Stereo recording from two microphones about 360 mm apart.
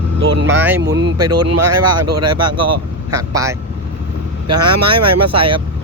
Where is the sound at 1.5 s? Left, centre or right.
Right.